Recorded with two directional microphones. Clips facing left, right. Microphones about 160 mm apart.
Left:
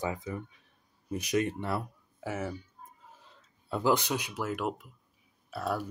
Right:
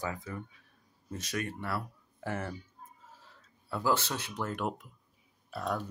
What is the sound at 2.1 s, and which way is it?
Speech, 5° left (ahead or behind).